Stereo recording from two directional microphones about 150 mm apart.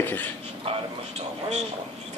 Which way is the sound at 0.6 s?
40° right (ahead or behind).